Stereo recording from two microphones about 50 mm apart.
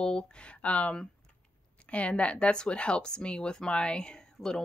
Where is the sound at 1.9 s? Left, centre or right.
Left.